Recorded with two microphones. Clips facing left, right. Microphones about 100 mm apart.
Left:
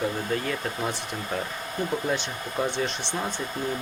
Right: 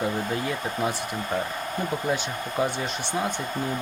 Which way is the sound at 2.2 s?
10° right (ahead or behind).